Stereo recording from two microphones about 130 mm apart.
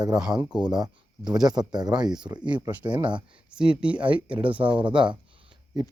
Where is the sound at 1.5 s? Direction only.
30° right (ahead or behind).